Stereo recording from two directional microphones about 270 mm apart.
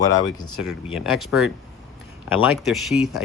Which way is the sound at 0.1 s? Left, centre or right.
Left.